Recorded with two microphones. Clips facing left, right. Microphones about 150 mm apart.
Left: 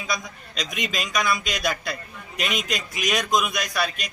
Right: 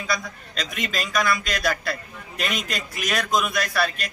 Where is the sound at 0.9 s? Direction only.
Centre (ahead or behind).